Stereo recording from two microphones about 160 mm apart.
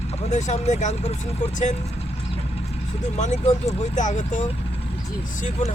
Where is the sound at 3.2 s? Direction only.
45° left (ahead or behind).